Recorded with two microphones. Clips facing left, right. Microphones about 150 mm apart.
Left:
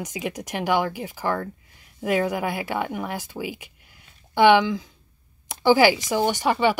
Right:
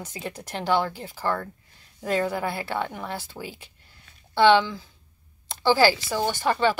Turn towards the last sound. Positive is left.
turn(degrees=15)  # may be behind; listen again after turning